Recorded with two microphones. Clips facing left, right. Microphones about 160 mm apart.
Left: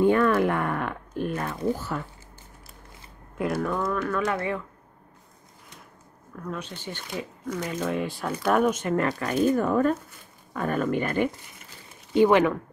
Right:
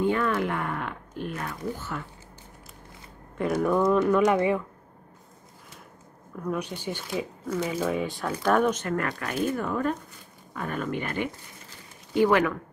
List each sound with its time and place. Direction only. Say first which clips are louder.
0.0 s speech: left 5 dB; 50° left (ahead or behind)
1.9 s speech: left 3 dB; 35° left (ahead or behind)
3.3 s speech: right 1 dB; 5° left (ahead or behind)
3.8 s speech: right 6 dB; 20° right (ahead or behind)
6.3 s speech: right 4 dB; 10° right (ahead or behind); by 8.9 s 10° left (ahead or behind)
8.9 s speech: left 4 dB; 30° left (ahead or behind)
12.1 s speech: left 3 dB; 20° left (ahead or behind)